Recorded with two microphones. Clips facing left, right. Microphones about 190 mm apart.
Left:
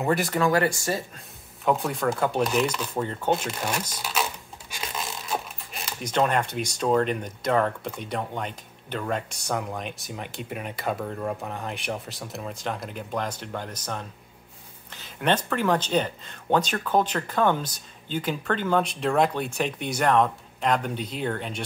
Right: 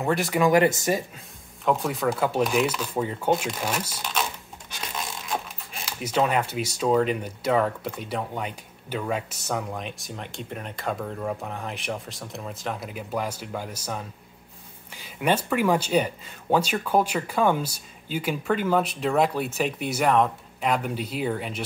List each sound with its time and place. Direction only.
0.0 s speech: centre (ahead or behind)
0.3 s speech: 15° right (ahead or behind)
1.1 s speech: centre (ahead or behind)